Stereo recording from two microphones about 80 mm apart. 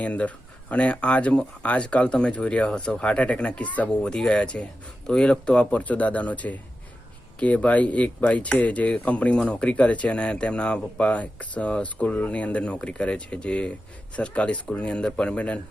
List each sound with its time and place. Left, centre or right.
0.0 s speech: centre